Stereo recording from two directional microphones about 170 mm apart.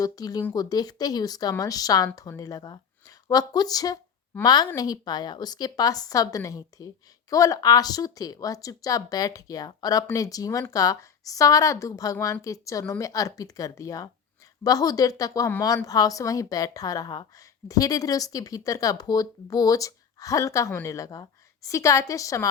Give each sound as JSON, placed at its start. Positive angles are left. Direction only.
{"t": 0.0, "sound": "a woman's voice", "side_deg": 20}